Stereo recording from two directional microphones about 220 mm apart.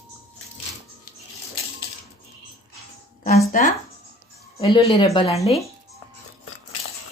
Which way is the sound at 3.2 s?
35° left (ahead or behind).